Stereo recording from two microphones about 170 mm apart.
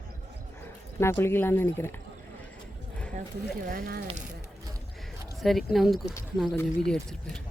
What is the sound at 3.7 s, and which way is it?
Speech, 65° right (ahead or behind).